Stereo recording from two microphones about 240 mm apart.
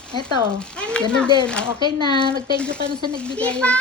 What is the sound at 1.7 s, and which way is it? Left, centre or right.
Speech, centre.